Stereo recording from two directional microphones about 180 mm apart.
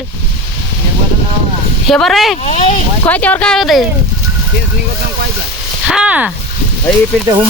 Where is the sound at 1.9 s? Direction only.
Centre (ahead or behind).